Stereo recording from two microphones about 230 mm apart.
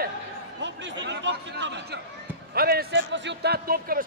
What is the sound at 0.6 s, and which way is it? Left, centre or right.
A man's voice, right.